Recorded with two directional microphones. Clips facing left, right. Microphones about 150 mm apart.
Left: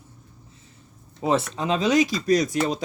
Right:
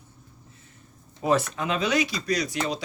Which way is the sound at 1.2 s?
25° left (ahead or behind).